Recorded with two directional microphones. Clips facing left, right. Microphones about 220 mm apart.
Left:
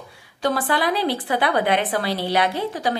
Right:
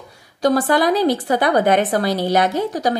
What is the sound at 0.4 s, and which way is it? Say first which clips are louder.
A woman's voice: right 6 dB; 40° right (ahead or behind).